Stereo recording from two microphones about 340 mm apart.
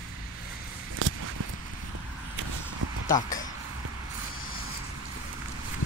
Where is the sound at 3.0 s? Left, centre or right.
Left.